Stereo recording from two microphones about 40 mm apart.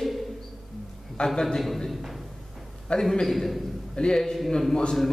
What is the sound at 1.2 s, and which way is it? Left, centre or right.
Speech, centre.